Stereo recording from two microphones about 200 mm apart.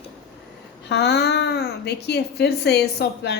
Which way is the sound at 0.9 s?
55° left (ahead or behind).